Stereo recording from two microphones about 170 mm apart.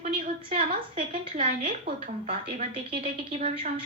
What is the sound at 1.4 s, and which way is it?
Speech, 55° right (ahead or behind).